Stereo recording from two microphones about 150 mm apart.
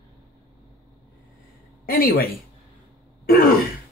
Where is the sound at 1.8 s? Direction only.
75° left (ahead or behind).